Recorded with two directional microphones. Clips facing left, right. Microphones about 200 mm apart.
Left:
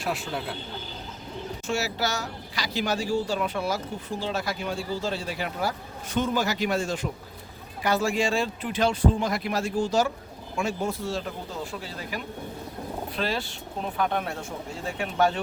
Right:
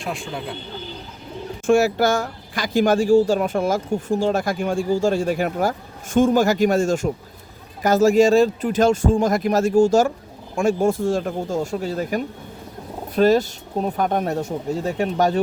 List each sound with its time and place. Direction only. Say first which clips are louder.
0.0 s speech: right 2 dB; 5° left (ahead or behind)
1.6 s speech: right 13 dB; 50° right (ahead or behind)